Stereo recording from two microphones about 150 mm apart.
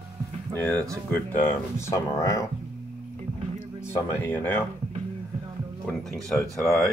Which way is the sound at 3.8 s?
15° left (ahead or behind).